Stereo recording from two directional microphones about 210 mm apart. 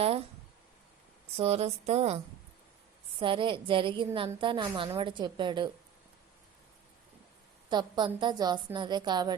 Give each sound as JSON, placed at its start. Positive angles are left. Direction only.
{"t": 1.4, "sound": "a woman's voice", "side_deg": -30}
{"t": 7.7, "sound": "a woman's voice", "side_deg": -20}